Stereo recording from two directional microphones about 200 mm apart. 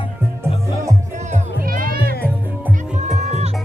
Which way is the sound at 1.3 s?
45° right (ahead or behind).